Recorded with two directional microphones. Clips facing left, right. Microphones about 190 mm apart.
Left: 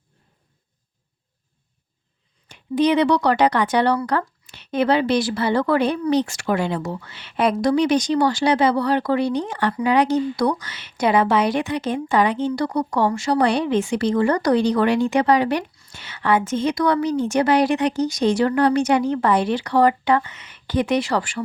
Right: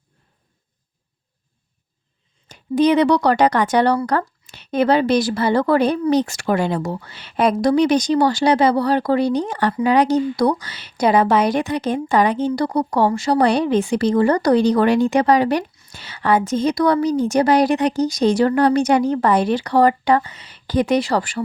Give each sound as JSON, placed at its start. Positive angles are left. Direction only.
{"t": 2.5, "sound": "speech", "side_deg": -45}